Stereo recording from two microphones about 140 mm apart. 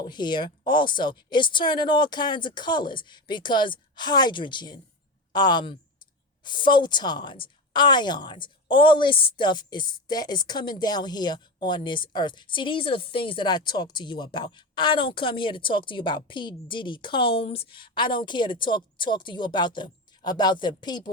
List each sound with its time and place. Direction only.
0.0 s a woman's voice: 30° left (ahead or behind)